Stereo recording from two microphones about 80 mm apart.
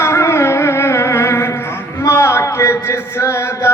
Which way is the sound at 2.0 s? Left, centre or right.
Left.